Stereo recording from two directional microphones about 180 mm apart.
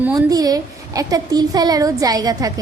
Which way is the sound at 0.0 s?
20° right (ahead or behind).